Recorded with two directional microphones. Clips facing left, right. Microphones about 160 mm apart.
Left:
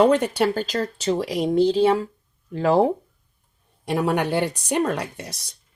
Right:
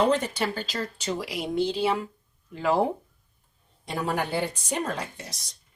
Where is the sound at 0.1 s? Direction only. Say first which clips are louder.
Left 6 dB; 60° left (ahead or behind).